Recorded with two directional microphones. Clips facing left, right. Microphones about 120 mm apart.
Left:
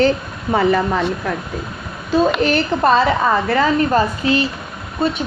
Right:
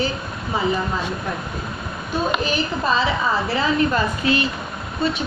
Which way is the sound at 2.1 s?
85° left.